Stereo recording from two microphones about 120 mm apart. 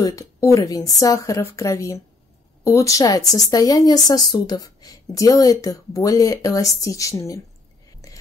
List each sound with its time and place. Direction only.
0.0 s speech: 25° left (ahead or behind)